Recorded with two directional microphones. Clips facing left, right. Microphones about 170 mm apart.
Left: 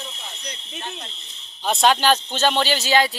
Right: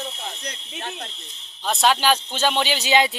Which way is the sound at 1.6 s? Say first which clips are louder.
Left 2 dB; centre (ahead or behind).